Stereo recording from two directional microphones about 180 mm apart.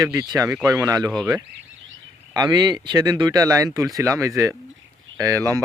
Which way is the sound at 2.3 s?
25° right (ahead or behind).